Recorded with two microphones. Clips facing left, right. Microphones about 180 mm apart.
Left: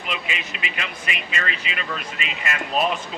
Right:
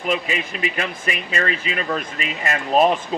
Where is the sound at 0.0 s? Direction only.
40° right (ahead or behind).